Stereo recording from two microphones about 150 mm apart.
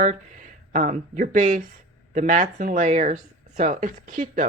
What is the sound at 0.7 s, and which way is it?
Speech, 60° right (ahead or behind).